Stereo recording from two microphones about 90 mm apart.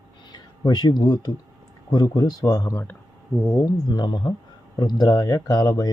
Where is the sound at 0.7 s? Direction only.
50° left (ahead or behind).